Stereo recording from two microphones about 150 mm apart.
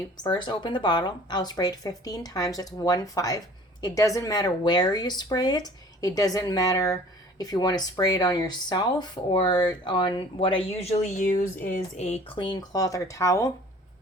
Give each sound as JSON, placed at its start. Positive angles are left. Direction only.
{"t": 0.2, "sound": "a woman's voice", "side_deg": 30}